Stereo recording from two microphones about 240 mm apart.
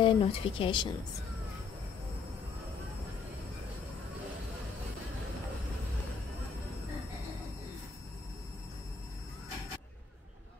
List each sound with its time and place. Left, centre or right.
0.0 s speech: left